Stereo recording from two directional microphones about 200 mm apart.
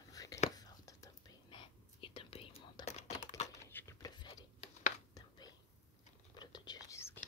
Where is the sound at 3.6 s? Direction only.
10° left (ahead or behind).